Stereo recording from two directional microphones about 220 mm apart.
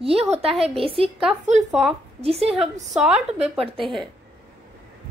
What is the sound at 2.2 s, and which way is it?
Speech, 25° right (ahead or behind).